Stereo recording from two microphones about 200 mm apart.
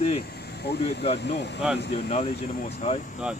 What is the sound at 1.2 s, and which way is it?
Speech, 60° left (ahead or behind).